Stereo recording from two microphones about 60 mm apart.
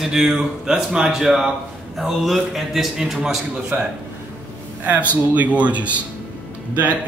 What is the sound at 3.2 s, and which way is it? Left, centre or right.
Speech, centre.